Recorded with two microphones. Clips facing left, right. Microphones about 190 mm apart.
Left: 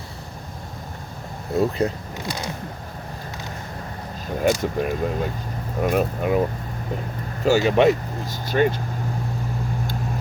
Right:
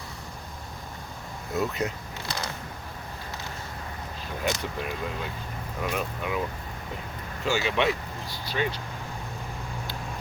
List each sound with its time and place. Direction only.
1.5 s speech: 30° left (ahead or behind)
4.4 s speech: 45° left (ahead or behind)